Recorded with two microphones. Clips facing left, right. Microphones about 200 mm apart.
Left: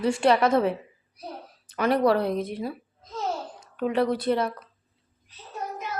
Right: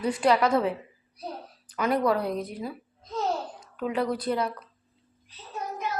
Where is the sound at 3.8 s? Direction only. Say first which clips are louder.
Left 4 dB; 25° left (ahead or behind).